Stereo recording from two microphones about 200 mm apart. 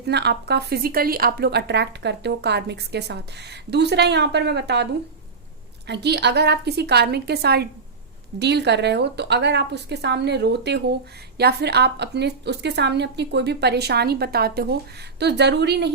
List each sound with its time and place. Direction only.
0.0 s speech: 55° right (ahead or behind)
5.9 s speech: 55° right (ahead or behind)